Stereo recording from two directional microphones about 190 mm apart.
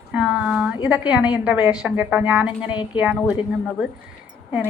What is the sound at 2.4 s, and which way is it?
Speech, 25° left (ahead or behind).